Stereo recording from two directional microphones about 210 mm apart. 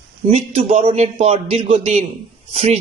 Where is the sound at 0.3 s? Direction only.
30° right (ahead or behind).